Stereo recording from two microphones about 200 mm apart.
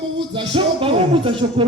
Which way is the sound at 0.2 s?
25° right (ahead or behind).